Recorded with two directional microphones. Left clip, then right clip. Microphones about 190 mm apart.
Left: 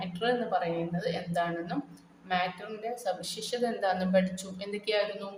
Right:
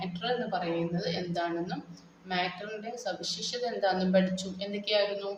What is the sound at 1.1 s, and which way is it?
Speech, 45° left (ahead or behind).